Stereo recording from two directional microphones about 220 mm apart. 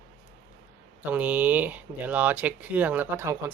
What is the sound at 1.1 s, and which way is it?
Speech, 5° right (ahead or behind).